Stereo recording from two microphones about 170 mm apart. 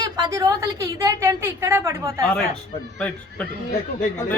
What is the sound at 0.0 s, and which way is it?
A woman's voice, 20° right (ahead or behind).